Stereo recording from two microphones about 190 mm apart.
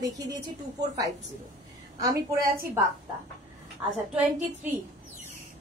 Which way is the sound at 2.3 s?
50° right (ahead or behind).